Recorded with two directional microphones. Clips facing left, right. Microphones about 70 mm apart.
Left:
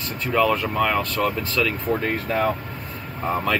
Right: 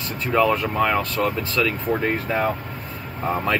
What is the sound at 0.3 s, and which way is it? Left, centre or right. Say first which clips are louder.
Speech: right 1 dB; centre.